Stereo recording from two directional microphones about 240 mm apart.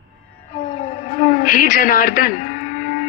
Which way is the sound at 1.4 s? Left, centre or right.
Left.